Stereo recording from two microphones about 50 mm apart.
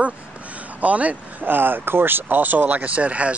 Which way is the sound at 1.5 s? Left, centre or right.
Right.